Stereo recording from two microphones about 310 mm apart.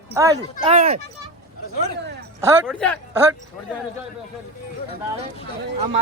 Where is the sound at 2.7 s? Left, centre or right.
Centre.